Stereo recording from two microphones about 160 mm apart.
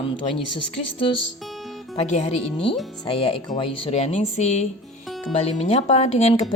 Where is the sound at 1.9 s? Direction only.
40° left (ahead or behind).